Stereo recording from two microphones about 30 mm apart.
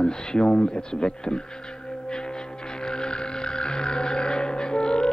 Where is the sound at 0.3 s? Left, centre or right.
Left.